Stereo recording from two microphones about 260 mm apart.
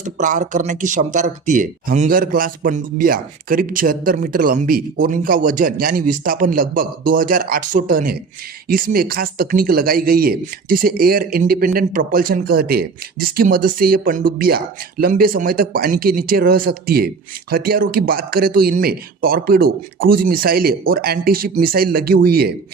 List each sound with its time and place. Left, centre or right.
0.0 s speech: right